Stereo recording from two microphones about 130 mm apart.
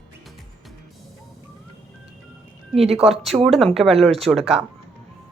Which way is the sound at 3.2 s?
Centre (ahead or behind).